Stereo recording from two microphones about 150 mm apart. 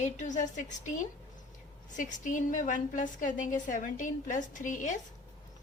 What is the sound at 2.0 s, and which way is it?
A woman's voice, 60° left (ahead or behind).